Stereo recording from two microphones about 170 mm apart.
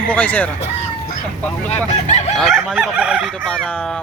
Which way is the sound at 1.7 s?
40° left (ahead or behind).